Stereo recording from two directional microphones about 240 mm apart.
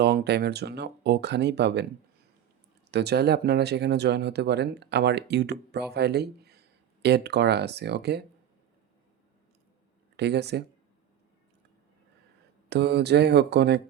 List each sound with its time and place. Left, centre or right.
0.0 s speech: right
2.9 s speech: right
10.2 s speech: right
12.6 s speech: right